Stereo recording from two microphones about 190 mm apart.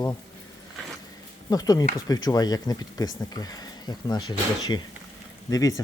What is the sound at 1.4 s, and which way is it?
Speech, 20° left (ahead or behind).